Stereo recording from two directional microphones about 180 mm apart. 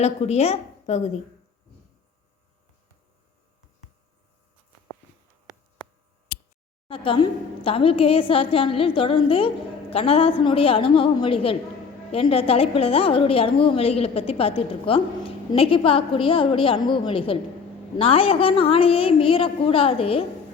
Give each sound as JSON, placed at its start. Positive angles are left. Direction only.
{"t": 0.0, "sound": "a woman's voice", "side_deg": 35}
{"t": 6.8, "sound": "a woman's voice", "side_deg": 30}